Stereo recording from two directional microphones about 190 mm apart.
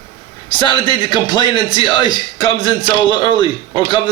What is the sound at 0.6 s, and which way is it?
A man's voice, 25° left (ahead or behind).